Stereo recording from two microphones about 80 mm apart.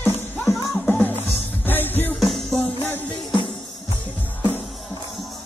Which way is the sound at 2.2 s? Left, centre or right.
Centre.